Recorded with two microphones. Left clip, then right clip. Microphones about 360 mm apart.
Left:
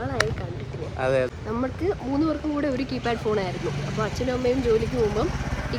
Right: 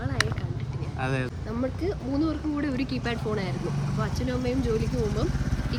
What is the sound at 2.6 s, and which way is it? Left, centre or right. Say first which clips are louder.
Speech: left 4 dB; centre.